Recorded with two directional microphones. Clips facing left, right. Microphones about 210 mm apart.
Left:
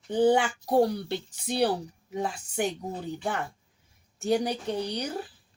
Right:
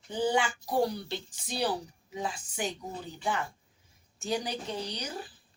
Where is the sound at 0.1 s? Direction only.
60° left (ahead or behind).